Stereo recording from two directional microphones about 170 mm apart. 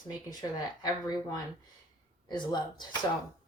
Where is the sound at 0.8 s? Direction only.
20° left (ahead or behind).